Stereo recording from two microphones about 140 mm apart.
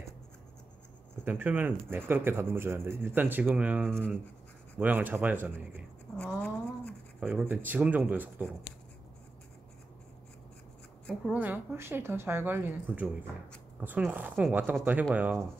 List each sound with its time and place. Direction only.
1.2 s speech: 15° right (ahead or behind)
6.1 s a sound: 5° left (ahead or behind)
7.2 s speech: 10° right (ahead or behind)
11.3 s speech: 15° right (ahead or behind)